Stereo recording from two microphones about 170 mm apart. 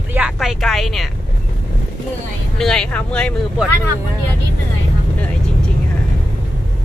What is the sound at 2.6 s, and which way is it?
Speech, 5° left (ahead or behind).